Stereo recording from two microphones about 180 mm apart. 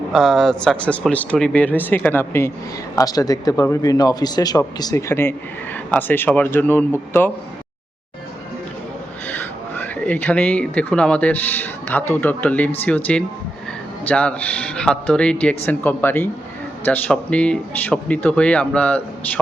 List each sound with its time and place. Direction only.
0.1 s speech: centre (ahead or behind)
9.3 s speech: 10° left (ahead or behind)